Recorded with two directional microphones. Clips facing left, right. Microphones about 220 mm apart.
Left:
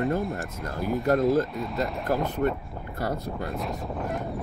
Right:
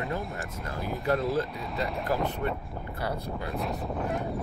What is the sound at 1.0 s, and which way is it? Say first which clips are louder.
Speech: left 5 dB; 45° left (ahead or behind).